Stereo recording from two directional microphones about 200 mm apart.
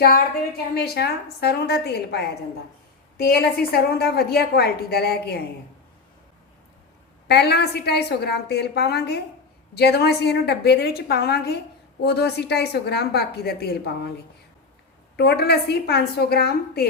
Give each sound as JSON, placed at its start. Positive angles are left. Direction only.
{"t": 0.8, "sound": "a woman's voice", "side_deg": 50}
{"t": 7.3, "sound": "a woman's voice", "side_deg": 55}
{"t": 15.1, "sound": "a woman's voice", "side_deg": 55}